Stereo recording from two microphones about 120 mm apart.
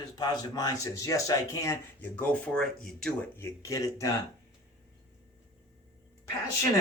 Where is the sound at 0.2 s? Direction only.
35° left (ahead or behind).